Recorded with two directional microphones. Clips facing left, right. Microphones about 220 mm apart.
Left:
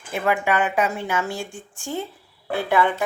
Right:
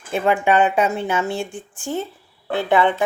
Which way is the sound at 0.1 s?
25° right (ahead or behind).